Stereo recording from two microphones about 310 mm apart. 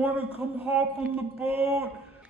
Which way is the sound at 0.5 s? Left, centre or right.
Centre.